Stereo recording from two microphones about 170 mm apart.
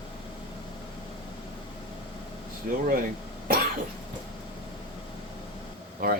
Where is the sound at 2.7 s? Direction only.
60° right (ahead or behind).